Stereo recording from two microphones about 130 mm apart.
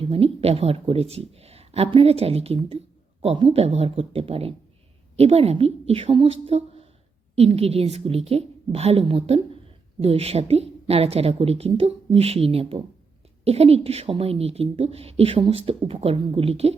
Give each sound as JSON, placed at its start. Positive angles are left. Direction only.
{"t": 0.0, "sound": "a woman's voice", "side_deg": -50}